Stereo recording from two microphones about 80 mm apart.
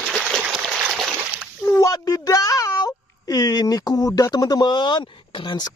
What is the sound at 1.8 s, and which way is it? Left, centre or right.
Speech, left.